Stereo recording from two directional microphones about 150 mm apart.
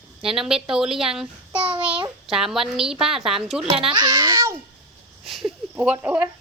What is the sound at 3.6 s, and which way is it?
Speech, 40° right (ahead or behind).